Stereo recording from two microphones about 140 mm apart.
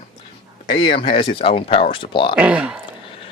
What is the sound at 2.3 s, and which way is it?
Speech, 10° right (ahead or behind).